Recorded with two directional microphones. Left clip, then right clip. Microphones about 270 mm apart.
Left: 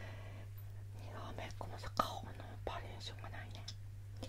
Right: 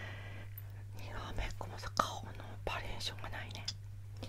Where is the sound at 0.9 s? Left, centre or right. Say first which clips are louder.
Right 4 dB; centre.